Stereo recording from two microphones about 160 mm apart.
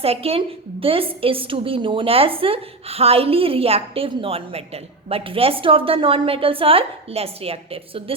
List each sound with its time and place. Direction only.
0.0 s a woman's voice: 40° right (ahead or behind)